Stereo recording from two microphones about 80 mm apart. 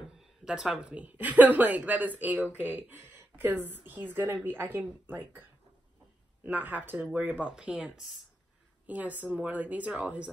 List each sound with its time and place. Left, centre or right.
0.5 s a woman's voice: centre
6.4 s a woman's voice: right
7.5 s speech: centre
8.8 s a woman's voice: centre